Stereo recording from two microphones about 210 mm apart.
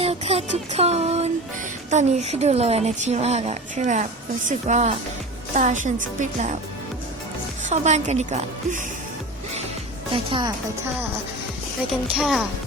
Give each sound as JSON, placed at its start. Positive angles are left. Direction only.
{"t": 0.0, "sound": "music", "side_deg": -30}
{"t": 1.9, "sound": "speech", "side_deg": -35}
{"t": 7.6, "sound": "speech", "side_deg": -35}
{"t": 10.1, "sound": "a woman's voice", "side_deg": -25}
{"t": 12.1, "sound": "speech", "side_deg": 0}